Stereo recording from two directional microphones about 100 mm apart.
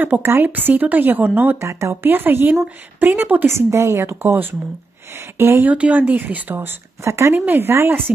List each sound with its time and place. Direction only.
0.0 s speech: 20° right (ahead or behind)